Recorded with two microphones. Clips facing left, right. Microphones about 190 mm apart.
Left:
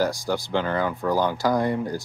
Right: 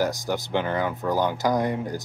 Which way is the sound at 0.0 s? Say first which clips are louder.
Left 1 dB; 20° right (ahead or behind).